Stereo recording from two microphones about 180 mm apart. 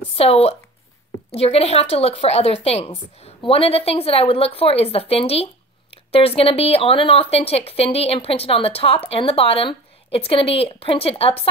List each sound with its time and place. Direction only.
0.1 s a woman's voice: 35° left (ahead or behind)